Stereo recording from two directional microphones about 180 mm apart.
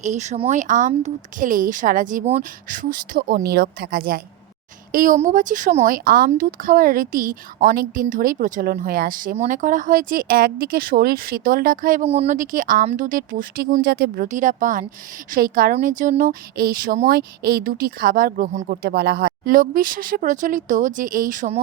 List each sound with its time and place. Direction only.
0.0 s speech: 40° right (ahead or behind)
12.0 s speech: 35° right (ahead or behind)
13.8 s speech: 60° right (ahead or behind)
14.3 s speech: 45° right (ahead or behind)